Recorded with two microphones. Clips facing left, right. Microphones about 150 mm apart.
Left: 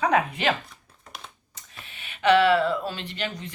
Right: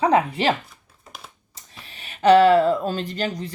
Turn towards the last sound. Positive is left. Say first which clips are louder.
# right 6 dB
turn(degrees=-40)  # may be behind; listen again after turning